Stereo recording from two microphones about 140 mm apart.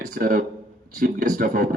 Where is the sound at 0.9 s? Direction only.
70° right (ahead or behind).